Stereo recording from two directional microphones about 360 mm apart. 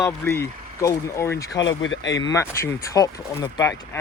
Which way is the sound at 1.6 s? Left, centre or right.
Left.